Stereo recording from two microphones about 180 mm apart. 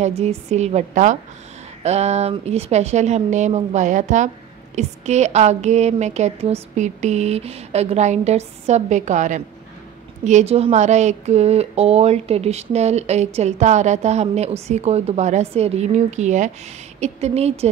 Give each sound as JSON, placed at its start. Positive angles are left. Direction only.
{"t": 0.0, "sound": "a woman's voice", "side_deg": -35}